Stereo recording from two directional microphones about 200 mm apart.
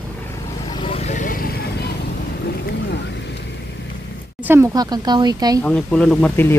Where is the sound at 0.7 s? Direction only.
25° left (ahead or behind); by 1.6 s 50° left (ahead or behind).